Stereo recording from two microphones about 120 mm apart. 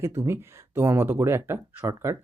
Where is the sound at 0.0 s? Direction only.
20° right (ahead or behind).